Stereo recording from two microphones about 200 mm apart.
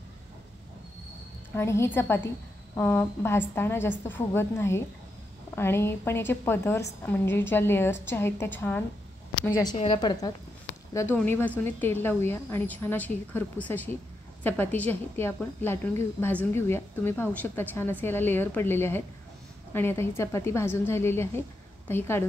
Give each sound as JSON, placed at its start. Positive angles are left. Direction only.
{"t": 1.5, "sound": "a woman's voice", "side_deg": 15}